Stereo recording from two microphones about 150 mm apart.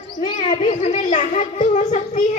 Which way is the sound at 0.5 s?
45° left (ahead or behind).